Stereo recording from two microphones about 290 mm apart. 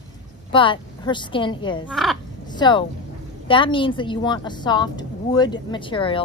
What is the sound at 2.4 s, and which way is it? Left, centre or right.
Speech, centre.